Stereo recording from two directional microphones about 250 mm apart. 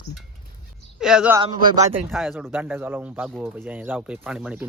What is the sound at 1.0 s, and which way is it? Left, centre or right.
Speech, centre.